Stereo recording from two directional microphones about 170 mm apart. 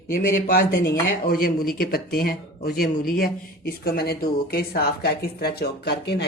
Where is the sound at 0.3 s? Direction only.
55° left (ahead or behind).